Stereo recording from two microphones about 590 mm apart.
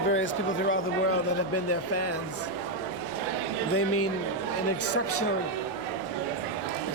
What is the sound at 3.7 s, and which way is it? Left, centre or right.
Speech, left.